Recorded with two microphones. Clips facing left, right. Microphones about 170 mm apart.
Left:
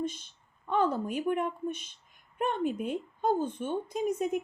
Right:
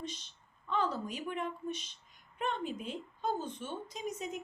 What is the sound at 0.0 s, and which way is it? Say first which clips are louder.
A woman's voice: left 9 dB; 50° left (ahead or behind).